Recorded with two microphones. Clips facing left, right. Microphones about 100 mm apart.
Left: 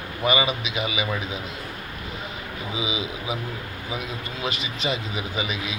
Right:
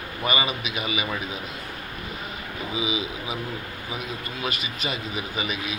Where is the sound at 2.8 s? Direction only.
20° left (ahead or behind).